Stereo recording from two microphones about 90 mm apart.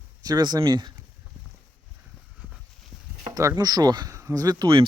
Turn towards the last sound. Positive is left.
turn(degrees=-45)  # may be behind; listen again after turning